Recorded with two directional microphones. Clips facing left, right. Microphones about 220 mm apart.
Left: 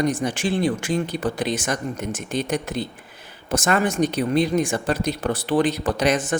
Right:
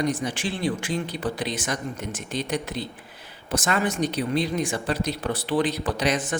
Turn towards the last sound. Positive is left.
turn(degrees=45)  # may be behind; listen again after turning